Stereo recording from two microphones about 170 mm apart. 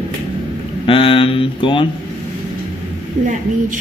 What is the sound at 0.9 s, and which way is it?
Speech, 30° left (ahead or behind).